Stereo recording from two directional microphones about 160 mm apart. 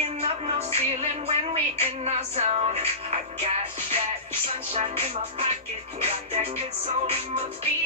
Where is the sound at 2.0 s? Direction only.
40° right (ahead or behind).